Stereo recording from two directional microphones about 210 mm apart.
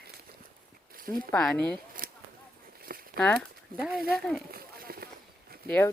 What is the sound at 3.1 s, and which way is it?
Speech, 5° left (ahead or behind).